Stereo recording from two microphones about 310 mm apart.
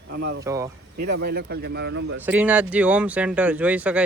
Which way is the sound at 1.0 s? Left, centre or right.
Right.